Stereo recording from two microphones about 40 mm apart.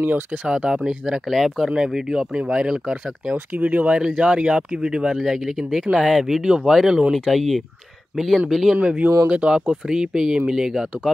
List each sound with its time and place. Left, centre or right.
0.0 s speech: right
0.5 s speech: centre
1.2 s speech: centre
1.9 s speech: centre
3.5 s speech: right
4.0 s speech: right; by 8.7 s centre
9.3 s speech: right
9.7 s speech: centre